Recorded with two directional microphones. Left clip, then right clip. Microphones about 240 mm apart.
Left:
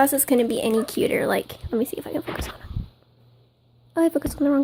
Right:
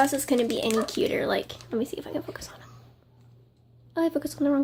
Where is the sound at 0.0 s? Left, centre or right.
Left.